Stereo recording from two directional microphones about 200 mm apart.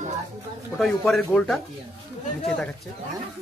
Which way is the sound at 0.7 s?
Centre (ahead or behind).